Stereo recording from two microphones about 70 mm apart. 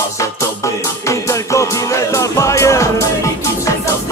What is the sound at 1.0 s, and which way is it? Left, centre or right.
Music, left.